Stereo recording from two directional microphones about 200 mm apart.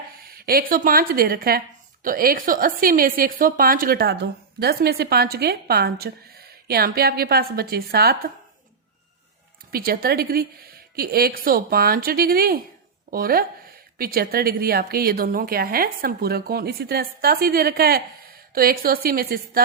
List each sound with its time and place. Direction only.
0.3 s a woman's voice: 50° right (ahead or behind)
9.7 s a woman's voice: 50° right (ahead or behind)